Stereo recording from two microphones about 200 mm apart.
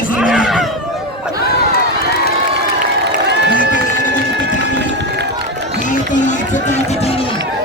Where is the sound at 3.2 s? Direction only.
60° right (ahead or behind).